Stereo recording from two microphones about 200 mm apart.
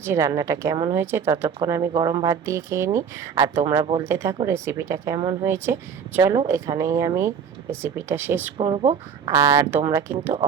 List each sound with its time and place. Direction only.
0.0 s speech: 15° right (ahead or behind)
8.5 s speech: 25° right (ahead or behind)